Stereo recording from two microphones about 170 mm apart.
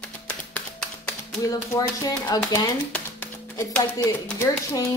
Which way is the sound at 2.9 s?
10° left (ahead or behind).